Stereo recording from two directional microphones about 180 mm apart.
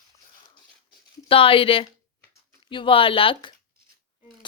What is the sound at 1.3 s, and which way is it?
A woman's voice, 30° left (ahead or behind).